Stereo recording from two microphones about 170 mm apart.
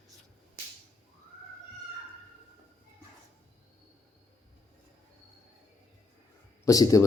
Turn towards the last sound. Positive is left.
turn(degrees=20)  # may be behind; listen again after turning